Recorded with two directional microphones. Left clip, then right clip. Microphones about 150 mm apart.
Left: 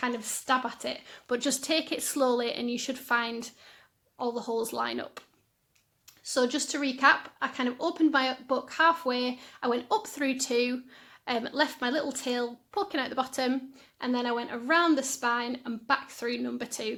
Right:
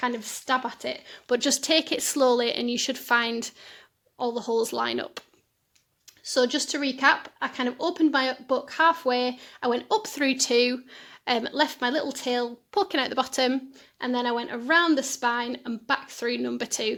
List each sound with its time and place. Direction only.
0.0 s speech: 30° right (ahead or behind)
4.2 s speech: 35° right (ahead or behind)
6.2 s speech: 35° right (ahead or behind)